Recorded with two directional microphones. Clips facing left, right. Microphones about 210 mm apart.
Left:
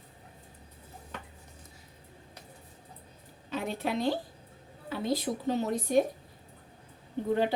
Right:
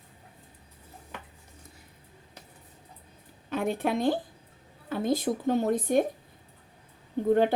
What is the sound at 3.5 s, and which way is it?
A woman's voice, 55° right (ahead or behind).